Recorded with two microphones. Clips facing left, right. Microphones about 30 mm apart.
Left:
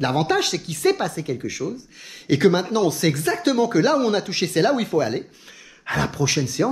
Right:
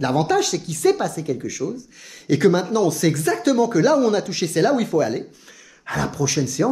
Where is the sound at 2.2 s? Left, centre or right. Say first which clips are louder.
Right 1 dB; left.